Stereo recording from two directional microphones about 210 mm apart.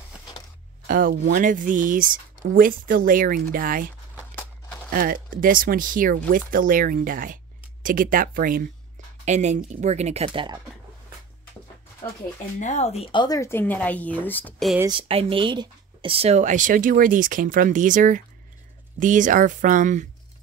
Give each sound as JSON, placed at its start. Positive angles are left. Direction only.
{"t": 0.8, "sound": "speech", "side_deg": -45}
{"t": 4.4, "sound": "a sound", "side_deg": 10}
{"t": 4.9, "sound": "speech", "side_deg": -40}
{"t": 12.5, "sound": "speech", "side_deg": 35}
{"t": 14.8, "sound": "speech", "side_deg": -25}